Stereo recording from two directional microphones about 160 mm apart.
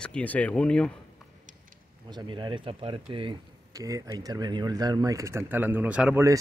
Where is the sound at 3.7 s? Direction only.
20° right (ahead or behind).